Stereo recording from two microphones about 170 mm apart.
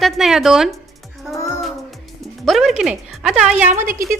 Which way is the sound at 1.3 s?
20° left (ahead or behind).